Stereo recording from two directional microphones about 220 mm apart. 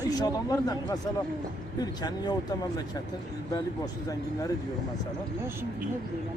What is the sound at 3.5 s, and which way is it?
Speech, 15° left (ahead or behind).